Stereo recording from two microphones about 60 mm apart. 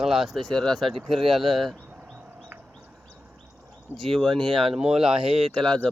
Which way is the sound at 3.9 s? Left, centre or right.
Centre.